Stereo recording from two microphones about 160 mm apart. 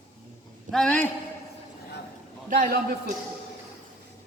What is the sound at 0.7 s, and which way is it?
Speech, 5° left (ahead or behind).